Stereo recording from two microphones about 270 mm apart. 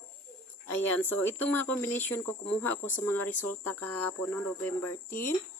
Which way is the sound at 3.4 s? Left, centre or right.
Left.